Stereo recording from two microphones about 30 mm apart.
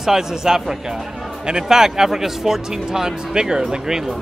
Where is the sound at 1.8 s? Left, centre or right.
Centre.